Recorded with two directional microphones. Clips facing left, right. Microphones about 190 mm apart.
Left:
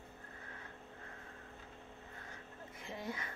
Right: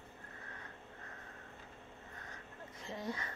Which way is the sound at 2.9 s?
25° left (ahead or behind).